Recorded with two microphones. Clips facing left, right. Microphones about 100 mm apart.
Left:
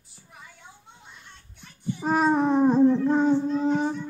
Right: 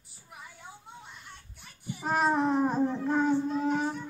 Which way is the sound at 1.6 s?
10° right (ahead or behind).